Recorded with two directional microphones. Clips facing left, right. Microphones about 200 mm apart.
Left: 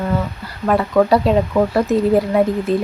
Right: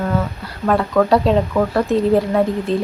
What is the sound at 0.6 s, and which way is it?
Speech, 5° left (ahead or behind).